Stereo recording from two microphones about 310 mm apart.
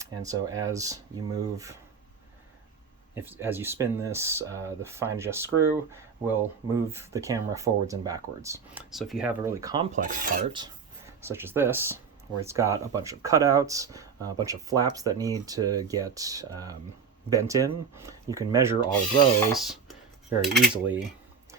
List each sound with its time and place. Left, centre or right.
0.0 s speech: centre
3.2 s speech: centre
9.9 s filing: right
11.2 s speech: centre
20.4 s cutlery: centre